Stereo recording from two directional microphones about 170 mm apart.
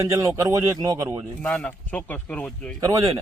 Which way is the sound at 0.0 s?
20° right (ahead or behind).